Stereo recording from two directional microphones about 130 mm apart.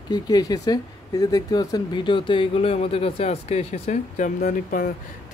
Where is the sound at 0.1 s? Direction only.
30° left (ahead or behind).